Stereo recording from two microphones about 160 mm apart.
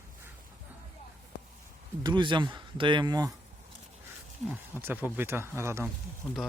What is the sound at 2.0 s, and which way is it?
Speech, 30° right (ahead or behind).